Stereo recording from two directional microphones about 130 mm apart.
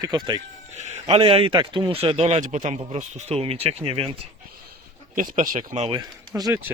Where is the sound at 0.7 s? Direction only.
60° right (ahead or behind).